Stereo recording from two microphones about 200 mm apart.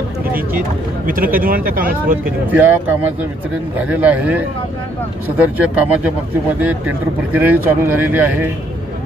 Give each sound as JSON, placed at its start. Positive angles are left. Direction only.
{"t": 1.0, "sound": "speech", "side_deg": -45}
{"t": 2.5, "sound": "speech", "side_deg": -10}
{"t": 5.6, "sound": "speech", "side_deg": -5}
{"t": 7.3, "sound": "speech", "side_deg": -10}